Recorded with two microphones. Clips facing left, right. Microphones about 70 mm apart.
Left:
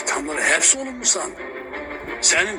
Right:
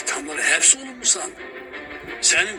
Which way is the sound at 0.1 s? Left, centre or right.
Left.